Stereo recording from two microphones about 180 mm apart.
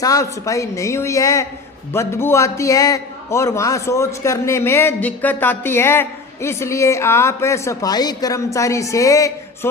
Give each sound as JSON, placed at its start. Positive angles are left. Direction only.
{"t": 0.0, "sound": "a man's voice", "side_deg": 20}